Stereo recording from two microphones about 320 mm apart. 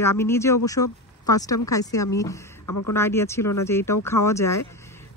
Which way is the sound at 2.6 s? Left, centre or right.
Left.